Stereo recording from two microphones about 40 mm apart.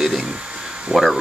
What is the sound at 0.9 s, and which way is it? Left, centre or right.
Speech, right.